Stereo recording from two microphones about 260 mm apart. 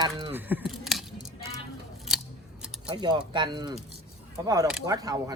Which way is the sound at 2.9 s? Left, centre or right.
Centre.